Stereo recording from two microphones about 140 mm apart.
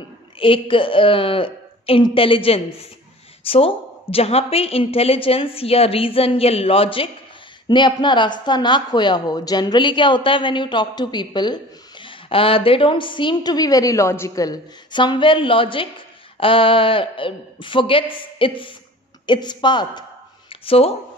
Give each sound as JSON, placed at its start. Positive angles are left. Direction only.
{"t": 0.4, "sound": "a woman's voice", "side_deg": 40}